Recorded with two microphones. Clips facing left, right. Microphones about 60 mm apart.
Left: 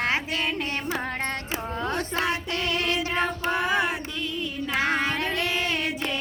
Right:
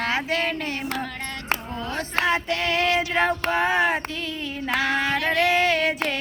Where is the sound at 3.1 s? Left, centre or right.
Right.